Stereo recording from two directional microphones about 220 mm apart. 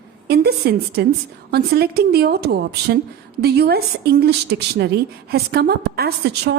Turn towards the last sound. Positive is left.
turn(degrees=-50)  # may be behind; listen again after turning